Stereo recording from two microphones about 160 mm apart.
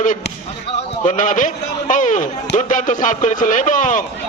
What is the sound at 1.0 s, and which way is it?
A man's voice, 50° left (ahead or behind).